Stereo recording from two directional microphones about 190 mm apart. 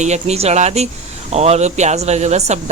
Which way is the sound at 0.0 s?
35° right (ahead or behind).